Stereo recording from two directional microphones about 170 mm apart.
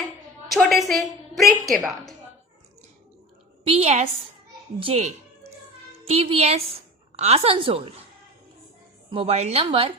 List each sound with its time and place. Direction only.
0.5 s a woman's voice: centre (ahead or behind)
3.6 s a woman's voice: 35° right (ahead or behind)
9.0 s a woman's voice: 35° right (ahead or behind)